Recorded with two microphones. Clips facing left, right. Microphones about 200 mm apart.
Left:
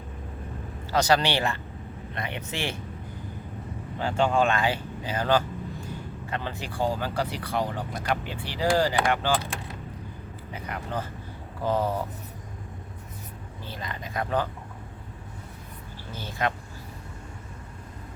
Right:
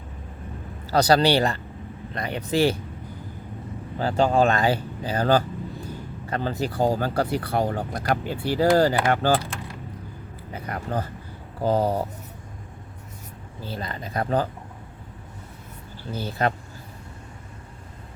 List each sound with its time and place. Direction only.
0.9 s speech: 35° right (ahead or behind)
3.9 s speech: 35° right (ahead or behind)
10.5 s speech: 40° right (ahead or behind)
13.7 s speech: 35° right (ahead or behind)
16.2 s speech: 40° right (ahead or behind)